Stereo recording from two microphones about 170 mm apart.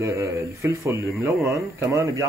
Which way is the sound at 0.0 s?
15° right (ahead or behind).